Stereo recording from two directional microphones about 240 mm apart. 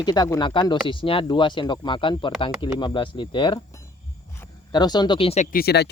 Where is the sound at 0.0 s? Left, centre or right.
Centre.